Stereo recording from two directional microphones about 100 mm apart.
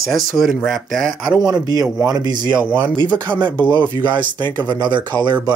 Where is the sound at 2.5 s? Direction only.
15° right (ahead or behind).